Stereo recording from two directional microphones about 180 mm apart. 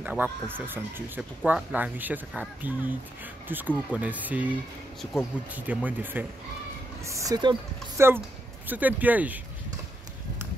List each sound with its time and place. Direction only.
0.0 s speech: 10° right (ahead or behind)